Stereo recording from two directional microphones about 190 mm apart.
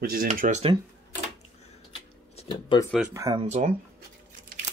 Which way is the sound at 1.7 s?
30° left (ahead or behind).